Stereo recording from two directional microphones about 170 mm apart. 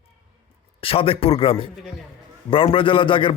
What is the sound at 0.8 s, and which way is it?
A man's voice, 35° left (ahead or behind).